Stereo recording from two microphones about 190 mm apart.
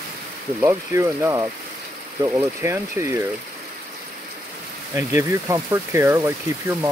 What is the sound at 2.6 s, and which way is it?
Speech, 15° right (ahead or behind).